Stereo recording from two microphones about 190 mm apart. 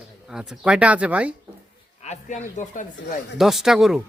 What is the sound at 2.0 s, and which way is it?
Speech, 40° left (ahead or behind).